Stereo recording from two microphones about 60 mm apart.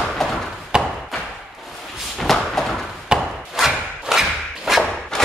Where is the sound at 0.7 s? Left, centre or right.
Centre.